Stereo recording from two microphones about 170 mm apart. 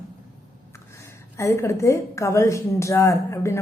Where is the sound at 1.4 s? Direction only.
15° left (ahead or behind).